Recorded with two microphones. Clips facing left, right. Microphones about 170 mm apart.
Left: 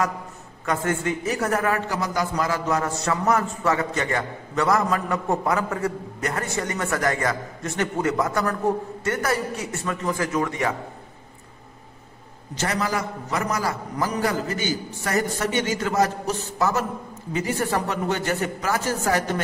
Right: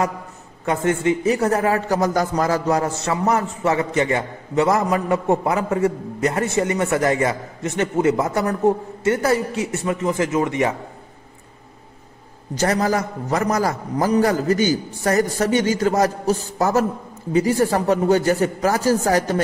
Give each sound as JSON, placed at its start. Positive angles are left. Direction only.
{"t": 0.7, "sound": "a man's voice", "side_deg": -25}
{"t": 1.9, "sound": "a man's voice", "side_deg": -45}
{"t": 12.5, "sound": "a man's voice", "side_deg": -45}